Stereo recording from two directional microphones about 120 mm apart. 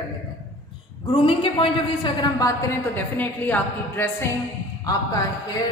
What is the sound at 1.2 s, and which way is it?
A woman's voice, 45° left (ahead or behind).